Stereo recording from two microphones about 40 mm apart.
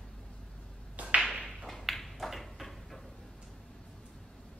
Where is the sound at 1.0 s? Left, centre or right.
Right.